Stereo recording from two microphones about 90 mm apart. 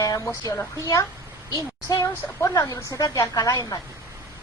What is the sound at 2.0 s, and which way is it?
Speech, 40° left (ahead or behind).